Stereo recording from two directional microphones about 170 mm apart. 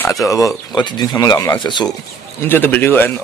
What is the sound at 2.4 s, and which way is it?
Speech, 10° left (ahead or behind).